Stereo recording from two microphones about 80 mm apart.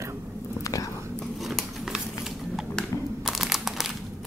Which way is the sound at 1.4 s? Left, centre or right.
Centre.